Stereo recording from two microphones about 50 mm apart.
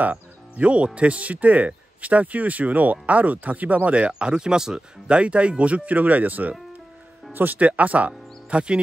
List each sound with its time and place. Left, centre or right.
0.0 s speech: right